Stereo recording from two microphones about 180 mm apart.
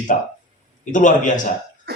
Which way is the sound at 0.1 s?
45° left (ahead or behind).